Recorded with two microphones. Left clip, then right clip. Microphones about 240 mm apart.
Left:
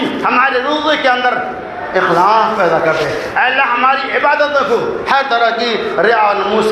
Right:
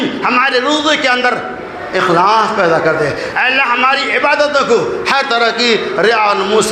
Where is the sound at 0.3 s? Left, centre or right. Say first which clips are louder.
Right 1 dB; right.